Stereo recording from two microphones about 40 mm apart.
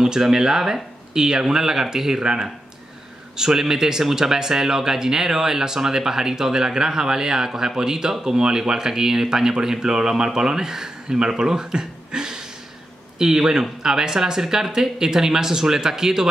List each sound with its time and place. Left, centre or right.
0.0 s speech: centre